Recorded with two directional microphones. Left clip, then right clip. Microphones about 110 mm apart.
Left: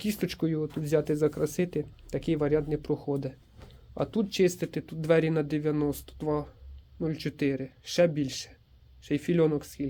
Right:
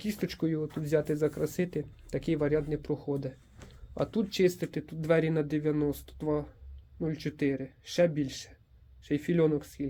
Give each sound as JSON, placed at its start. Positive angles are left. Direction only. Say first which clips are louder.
{"t": 0.0, "sound": "speech", "louder": "left 2 dB", "side_deg": 35}
{"t": 3.9, "sound": "speech", "louder": "left 2 dB", "side_deg": 5}